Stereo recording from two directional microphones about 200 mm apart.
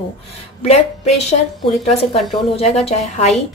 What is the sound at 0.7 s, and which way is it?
A woman's voice, 30° left (ahead or behind).